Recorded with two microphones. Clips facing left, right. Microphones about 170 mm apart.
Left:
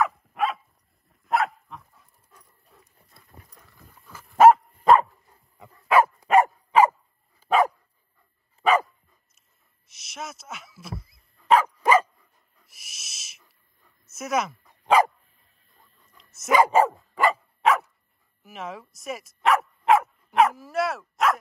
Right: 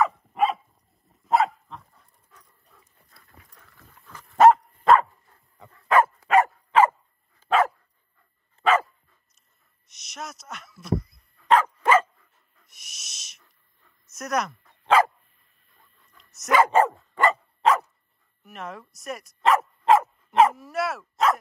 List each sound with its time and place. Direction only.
0.0 s dog: centre (ahead or behind)
3.3 s horse: 20° left (ahead or behind)
3.8 s dog: 5° left (ahead or behind)
9.8 s dog: centre (ahead or behind)
14.6 s dog: 15° left (ahead or behind)
16.2 s dog: centre (ahead or behind)